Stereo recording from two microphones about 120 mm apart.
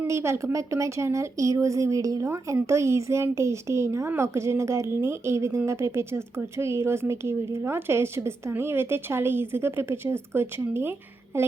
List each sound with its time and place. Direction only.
0.0 s speech: 20° right (ahead or behind)